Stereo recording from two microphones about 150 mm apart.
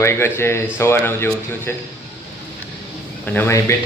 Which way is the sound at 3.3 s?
15° left (ahead or behind).